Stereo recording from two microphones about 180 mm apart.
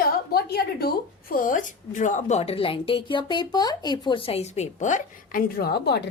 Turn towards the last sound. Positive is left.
turn(degrees=65)  # may be behind; listen again after turning